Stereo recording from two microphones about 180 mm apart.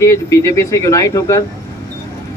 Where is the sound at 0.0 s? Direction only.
15° left (ahead or behind).